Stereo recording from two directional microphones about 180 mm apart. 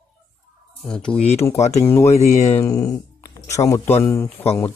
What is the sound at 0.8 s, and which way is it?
A man's voice, 5° left (ahead or behind).